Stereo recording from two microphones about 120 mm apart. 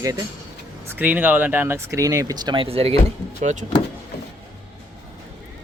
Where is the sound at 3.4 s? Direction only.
90° right.